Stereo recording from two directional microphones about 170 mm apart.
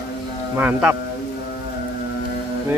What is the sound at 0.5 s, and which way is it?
Speech, 10° right (ahead or behind).